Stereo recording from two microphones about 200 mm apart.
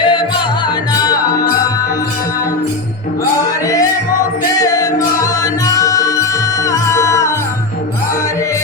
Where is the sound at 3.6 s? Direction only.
15° left (ahead or behind).